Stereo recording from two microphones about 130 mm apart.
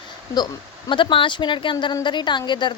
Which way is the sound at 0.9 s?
40° left (ahead or behind).